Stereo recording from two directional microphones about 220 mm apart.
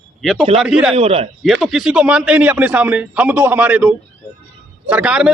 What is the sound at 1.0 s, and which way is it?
Speech, 25° right (ahead or behind).